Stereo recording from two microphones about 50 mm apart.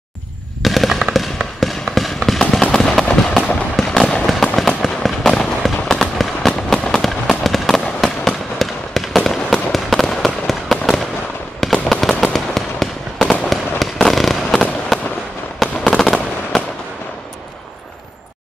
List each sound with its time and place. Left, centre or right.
0.6 s fireworks: centre
4.3 s fireworks: centre
13.2 s fireworks: centre
13.5 s fireworks: centre